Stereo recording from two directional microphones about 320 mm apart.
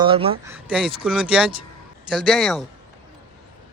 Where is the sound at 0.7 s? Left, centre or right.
Centre.